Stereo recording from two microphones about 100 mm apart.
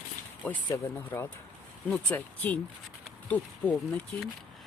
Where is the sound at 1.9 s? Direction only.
10° left (ahead or behind).